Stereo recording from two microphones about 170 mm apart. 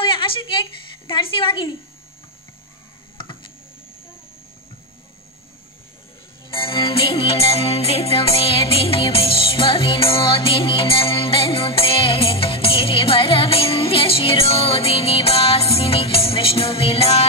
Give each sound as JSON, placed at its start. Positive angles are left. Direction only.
{"t": 0.0, "sound": "a sound", "side_deg": 30}
{"t": 1.0, "sound": "speech", "side_deg": 30}
{"t": 3.2, "sound": "computer keyboard", "side_deg": 30}
{"t": 6.5, "sound": "music", "side_deg": 30}